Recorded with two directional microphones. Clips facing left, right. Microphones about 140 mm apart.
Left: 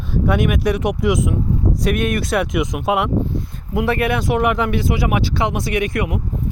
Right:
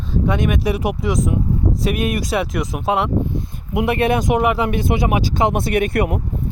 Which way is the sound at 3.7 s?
20° right (ahead or behind).